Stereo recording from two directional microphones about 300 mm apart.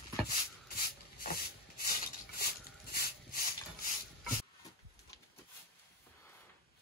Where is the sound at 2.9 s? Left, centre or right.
Left.